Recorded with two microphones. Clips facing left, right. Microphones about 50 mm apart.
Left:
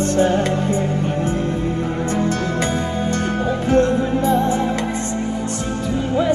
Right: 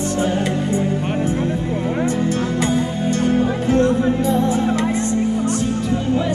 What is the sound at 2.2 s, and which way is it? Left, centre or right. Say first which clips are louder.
Music: right 1 dB; left.